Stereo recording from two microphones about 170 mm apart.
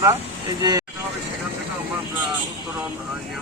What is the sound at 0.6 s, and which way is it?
Speech, 20° right (ahead or behind).